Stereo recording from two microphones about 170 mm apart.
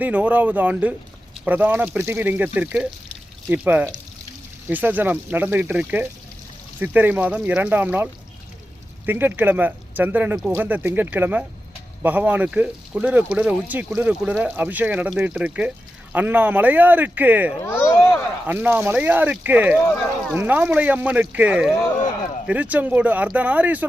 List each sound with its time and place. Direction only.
0.0 s speech: 10° right (ahead or behind)
17.6 s a sound: 15° left (ahead or behind)
18.4 s speech: 10° right (ahead or behind)